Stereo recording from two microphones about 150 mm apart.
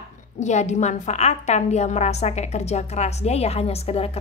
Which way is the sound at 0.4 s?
50° left (ahead or behind).